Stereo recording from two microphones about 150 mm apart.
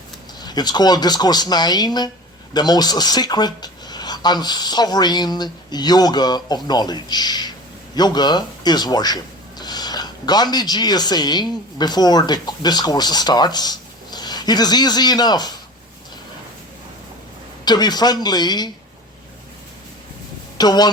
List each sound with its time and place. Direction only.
0.3 s speech: 25° left (ahead or behind)
17.7 s speech: 25° left (ahead or behind)
20.6 s speech: 25° left (ahead or behind)